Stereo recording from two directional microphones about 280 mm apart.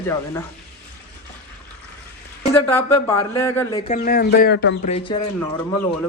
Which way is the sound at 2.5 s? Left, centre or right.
Centre.